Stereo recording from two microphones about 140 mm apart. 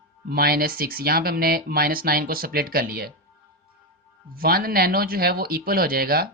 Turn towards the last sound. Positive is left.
turn(degrees=-90)